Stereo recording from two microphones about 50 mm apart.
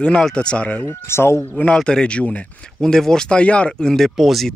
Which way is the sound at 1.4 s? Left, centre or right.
Left.